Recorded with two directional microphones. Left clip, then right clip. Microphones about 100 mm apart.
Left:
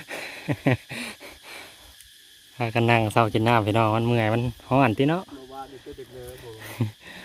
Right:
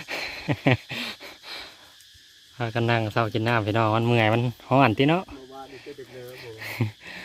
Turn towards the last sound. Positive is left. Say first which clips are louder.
# right 2 dB
turn(degrees=0)  # may be behind; listen again after turning